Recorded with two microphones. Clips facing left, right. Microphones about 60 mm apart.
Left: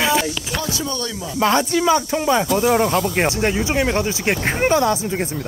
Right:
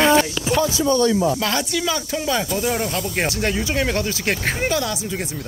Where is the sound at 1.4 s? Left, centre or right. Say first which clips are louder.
Left 6 dB; left.